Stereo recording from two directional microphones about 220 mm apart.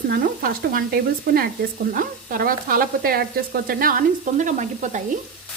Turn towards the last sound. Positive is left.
turn(degrees=-35)  # may be behind; listen again after turning